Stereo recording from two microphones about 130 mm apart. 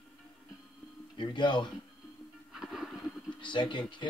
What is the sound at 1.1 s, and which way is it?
Speech, 35° left (ahead or behind).